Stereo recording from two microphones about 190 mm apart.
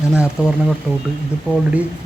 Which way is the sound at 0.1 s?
5° right (ahead or behind).